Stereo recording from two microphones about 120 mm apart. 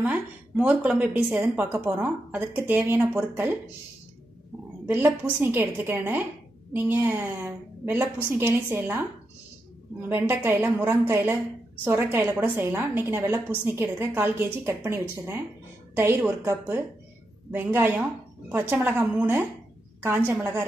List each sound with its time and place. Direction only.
0.0 s a woman's voice: 10° right (ahead or behind)
4.8 s a woman's voice: 20° right (ahead or behind)
10.0 s a woman's voice: 15° right (ahead or behind)